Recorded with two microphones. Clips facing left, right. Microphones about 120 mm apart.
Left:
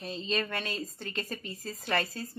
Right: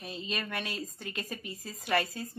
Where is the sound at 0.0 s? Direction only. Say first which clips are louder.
Left 5 dB; 10° right (ahead or behind).